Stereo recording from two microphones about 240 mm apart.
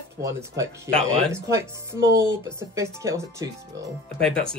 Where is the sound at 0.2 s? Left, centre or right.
Centre.